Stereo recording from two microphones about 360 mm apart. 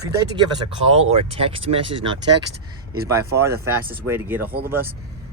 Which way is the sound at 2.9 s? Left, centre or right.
Right.